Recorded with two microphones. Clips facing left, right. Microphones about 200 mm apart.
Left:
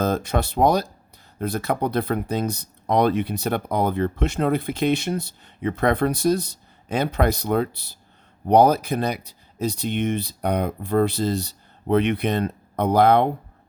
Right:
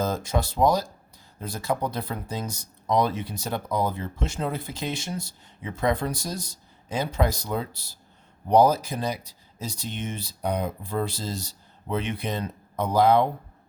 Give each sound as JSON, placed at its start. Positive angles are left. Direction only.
{"t": 0.0, "sound": "speech", "side_deg": 60}